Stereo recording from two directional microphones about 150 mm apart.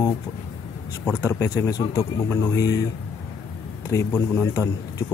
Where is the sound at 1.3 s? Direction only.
20° left (ahead or behind).